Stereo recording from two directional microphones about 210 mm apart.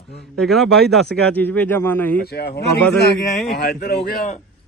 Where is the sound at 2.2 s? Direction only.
50° left (ahead or behind).